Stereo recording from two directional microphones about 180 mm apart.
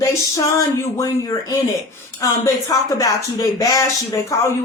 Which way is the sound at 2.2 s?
20° left (ahead or behind).